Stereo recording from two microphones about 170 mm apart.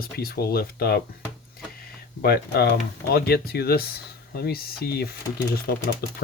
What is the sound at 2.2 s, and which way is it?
Speech, 65° left (ahead or behind).